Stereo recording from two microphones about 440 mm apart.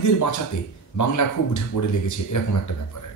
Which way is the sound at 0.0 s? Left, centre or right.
Left.